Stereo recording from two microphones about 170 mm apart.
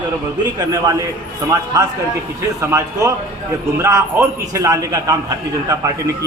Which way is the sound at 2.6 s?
20° right (ahead or behind).